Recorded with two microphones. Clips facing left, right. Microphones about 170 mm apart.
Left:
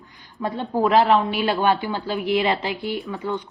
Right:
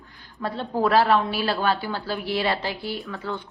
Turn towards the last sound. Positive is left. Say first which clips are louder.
# left 4 dB
turn(degrees=20)  # may be behind; listen again after turning